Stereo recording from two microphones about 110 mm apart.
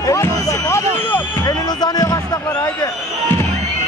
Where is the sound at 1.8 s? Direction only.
35° left (ahead or behind).